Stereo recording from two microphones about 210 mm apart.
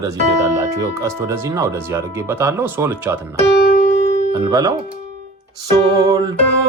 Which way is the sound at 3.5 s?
40° left (ahead or behind).